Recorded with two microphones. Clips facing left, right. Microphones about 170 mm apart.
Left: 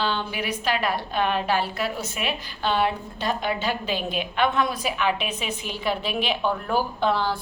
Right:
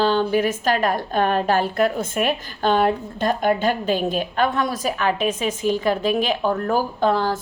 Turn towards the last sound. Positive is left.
turn(degrees=-45)  # may be behind; listen again after turning